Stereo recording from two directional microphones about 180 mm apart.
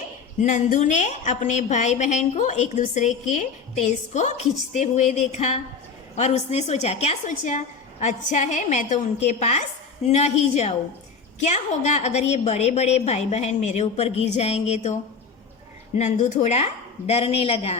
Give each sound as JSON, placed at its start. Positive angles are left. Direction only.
{"t": 0.4, "sound": "a woman's voice", "side_deg": 45}
{"t": 16.0, "sound": "a woman's voice", "side_deg": 40}